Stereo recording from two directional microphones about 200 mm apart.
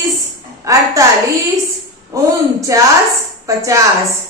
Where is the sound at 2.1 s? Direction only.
15° right (ahead or behind).